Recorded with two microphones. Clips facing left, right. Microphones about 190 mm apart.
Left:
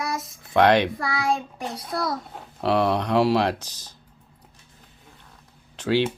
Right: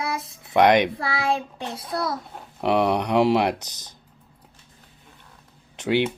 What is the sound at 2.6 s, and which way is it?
Speech, 15° right (ahead or behind).